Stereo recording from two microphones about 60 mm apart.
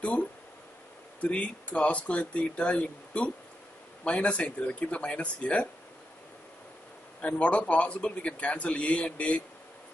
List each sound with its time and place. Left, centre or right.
0.0 s a man's voice: left
7.2 s a man's voice: left